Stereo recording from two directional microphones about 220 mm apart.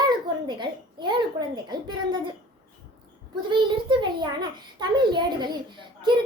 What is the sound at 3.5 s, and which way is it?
A child's voice, 20° right (ahead or behind).